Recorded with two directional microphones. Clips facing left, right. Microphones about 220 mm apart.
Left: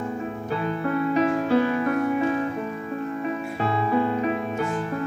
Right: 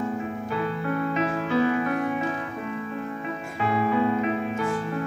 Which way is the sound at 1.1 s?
35° left (ahead or behind).